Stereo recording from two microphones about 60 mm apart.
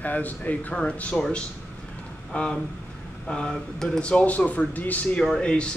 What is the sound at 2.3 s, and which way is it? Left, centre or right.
Speech, centre.